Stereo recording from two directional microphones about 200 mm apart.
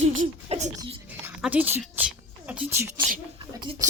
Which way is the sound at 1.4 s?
5° right (ahead or behind).